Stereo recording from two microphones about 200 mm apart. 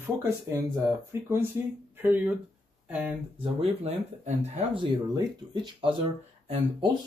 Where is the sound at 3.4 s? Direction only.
30° right (ahead or behind).